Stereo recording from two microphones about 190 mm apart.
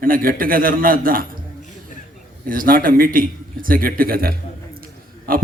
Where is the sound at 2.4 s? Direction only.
45° right (ahead or behind).